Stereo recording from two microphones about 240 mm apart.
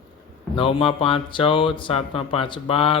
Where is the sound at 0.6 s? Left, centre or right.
Left.